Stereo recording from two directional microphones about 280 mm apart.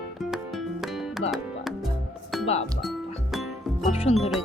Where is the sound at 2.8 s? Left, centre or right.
Centre.